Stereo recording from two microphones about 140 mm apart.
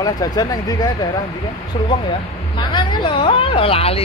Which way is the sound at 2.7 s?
35° left (ahead or behind).